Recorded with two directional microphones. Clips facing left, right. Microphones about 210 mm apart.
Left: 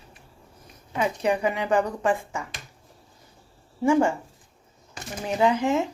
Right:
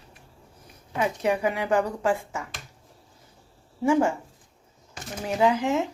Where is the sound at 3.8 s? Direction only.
5° right (ahead or behind).